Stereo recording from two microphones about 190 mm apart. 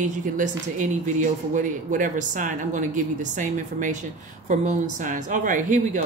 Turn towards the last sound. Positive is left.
turn(degrees=-45)  # may be behind; listen again after turning